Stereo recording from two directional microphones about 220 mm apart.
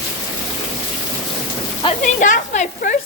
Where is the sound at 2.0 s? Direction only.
35° left (ahead or behind).